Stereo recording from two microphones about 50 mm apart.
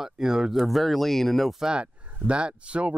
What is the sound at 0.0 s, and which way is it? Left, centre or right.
Speech, centre.